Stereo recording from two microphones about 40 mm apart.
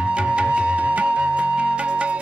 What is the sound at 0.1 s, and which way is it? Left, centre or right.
Music, right.